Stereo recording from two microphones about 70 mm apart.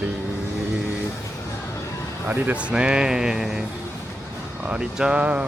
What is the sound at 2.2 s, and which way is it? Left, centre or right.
A man's voice, right.